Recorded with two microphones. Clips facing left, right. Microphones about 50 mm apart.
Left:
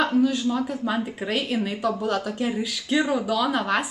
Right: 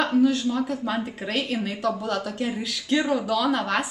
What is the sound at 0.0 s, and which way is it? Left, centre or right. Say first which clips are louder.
A woman's voice: even; centre.